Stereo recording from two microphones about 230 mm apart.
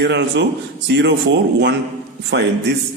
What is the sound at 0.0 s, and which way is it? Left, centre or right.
Speech, right.